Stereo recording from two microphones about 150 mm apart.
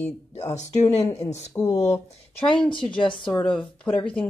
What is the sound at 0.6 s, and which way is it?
Speech, 50° left (ahead or behind).